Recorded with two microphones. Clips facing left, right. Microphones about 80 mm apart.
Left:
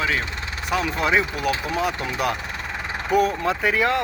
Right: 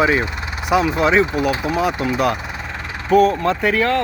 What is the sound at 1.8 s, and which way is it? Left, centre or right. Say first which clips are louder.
Speech: right 7 dB; centre.